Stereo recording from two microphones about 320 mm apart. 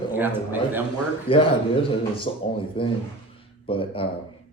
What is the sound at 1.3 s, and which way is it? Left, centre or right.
A man's voice, centre.